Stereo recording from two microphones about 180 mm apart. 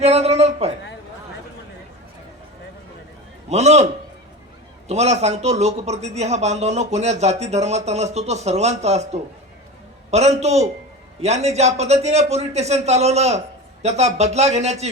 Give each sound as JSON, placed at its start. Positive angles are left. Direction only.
{"t": 0.0, "sound": "a man's voice", "side_deg": -35}
{"t": 3.5, "sound": "speech", "side_deg": -35}
{"t": 4.9, "sound": "speech", "side_deg": -35}
{"t": 10.1, "sound": "speech", "side_deg": -40}